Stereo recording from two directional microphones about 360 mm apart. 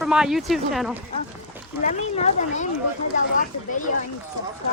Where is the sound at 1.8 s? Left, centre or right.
Centre.